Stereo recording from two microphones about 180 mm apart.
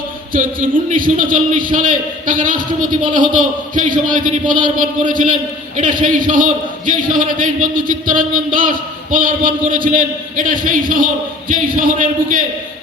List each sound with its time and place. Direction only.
0.3 s a man's voice: 50° right (ahead or behind)